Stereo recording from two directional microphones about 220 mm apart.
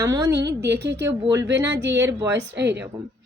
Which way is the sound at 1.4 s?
50° right (ahead or behind).